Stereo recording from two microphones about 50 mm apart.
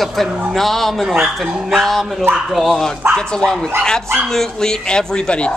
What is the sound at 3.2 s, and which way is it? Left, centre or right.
Speech, centre.